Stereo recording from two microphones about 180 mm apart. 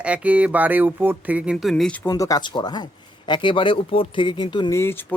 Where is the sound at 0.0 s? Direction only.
5° right (ahead or behind).